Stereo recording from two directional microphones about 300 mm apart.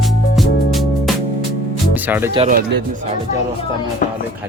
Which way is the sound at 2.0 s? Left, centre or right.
Centre.